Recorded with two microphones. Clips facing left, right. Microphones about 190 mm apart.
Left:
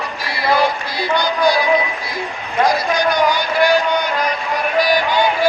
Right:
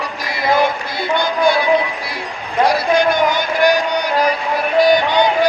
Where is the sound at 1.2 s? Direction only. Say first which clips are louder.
Right 1 dB; 25° right (ahead or behind).